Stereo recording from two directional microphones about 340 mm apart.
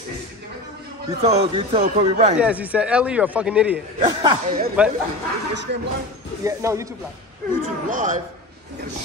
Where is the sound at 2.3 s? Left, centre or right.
Centre.